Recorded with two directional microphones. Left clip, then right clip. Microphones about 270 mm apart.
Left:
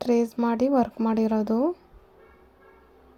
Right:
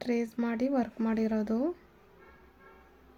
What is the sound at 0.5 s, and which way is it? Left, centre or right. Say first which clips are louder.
Speech: left 8 dB; centre.